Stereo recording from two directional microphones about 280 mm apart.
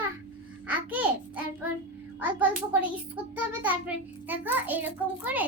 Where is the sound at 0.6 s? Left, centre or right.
Centre.